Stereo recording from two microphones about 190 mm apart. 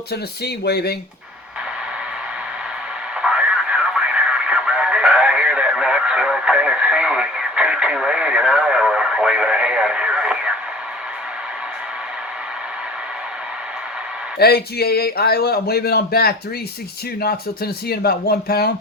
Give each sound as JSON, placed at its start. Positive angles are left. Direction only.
{"t": 0.1, "sound": "speech", "side_deg": 55}
{"t": 3.2, "sound": "radio", "side_deg": -5}
{"t": 14.3, "sound": "speech", "side_deg": 55}